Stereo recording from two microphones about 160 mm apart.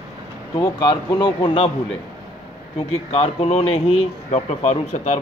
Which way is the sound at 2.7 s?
40° left (ahead or behind).